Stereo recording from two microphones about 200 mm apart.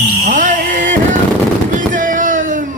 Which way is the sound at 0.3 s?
40° right (ahead or behind).